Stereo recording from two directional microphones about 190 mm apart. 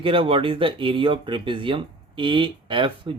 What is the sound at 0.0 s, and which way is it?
Speech, 30° right (ahead or behind).